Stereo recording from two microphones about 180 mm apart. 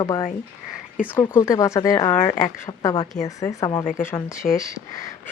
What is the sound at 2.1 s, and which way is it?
Speech, 30° left (ahead or behind).